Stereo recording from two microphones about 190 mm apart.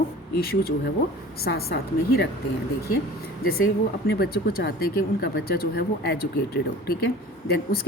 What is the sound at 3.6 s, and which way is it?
Speech, 55° left (ahead or behind).